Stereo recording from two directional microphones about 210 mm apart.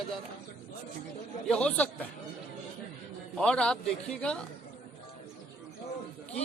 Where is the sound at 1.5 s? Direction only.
5° left (ahead or behind).